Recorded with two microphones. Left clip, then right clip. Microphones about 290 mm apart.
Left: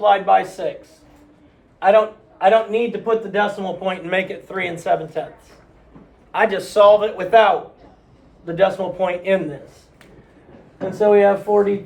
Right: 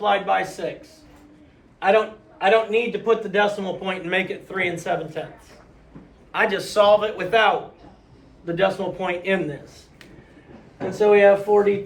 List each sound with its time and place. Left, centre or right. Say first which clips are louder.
0.0 s a man's voice: left 6 dB; left
1.8 s a man's voice: left 5 dB; centre
6.3 s a man's voice: left 3 dB; left
8.4 s a man's voice: left 4 dB; centre
10.9 s speech: left 1 dB; centre